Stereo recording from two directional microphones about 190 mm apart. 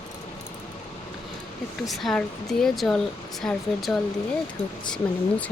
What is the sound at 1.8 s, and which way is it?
Speech, centre (ahead or behind).